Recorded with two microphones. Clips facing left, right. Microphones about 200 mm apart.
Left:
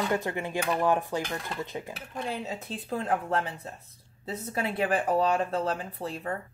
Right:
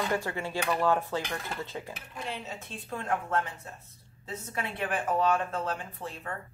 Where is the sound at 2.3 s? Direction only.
35° left (ahead or behind).